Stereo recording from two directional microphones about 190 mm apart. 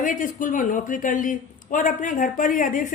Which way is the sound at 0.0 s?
45° left (ahead or behind).